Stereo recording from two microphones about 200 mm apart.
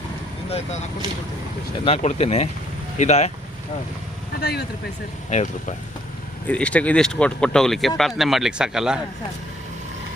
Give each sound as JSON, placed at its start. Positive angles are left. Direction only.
{"t": 1.8, "sound": "speech", "side_deg": 30}
{"t": 4.4, "sound": "speech", "side_deg": 55}
{"t": 5.3, "sound": "speech", "side_deg": 35}
{"t": 6.5, "sound": "speech", "side_deg": 5}